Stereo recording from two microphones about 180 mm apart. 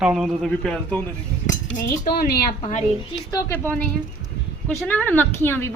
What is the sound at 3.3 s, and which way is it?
Speech, 15° left (ahead or behind).